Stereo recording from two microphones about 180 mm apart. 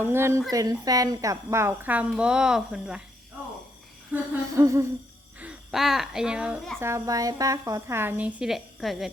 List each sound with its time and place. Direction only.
0.0 s a child's voice: 15° right (ahead or behind)
4.1 s a child's voice: 15° right (ahead or behind)
5.4 s a child's voice: 5° right (ahead or behind)